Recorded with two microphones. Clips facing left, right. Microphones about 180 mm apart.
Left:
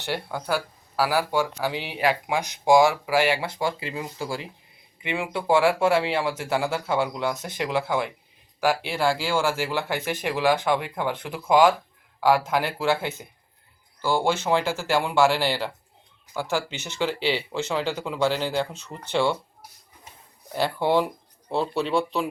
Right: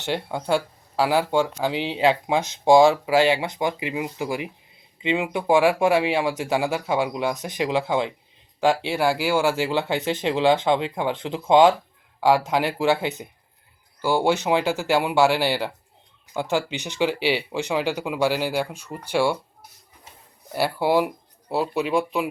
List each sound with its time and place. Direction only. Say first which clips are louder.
0.0 s speech: right 3 dB; 20° right (ahead or behind)
20.5 s speech: right 1 dB; 10° right (ahead or behind)